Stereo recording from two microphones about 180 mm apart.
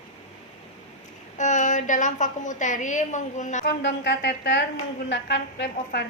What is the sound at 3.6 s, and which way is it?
A woman's voice, 75° left (ahead or behind).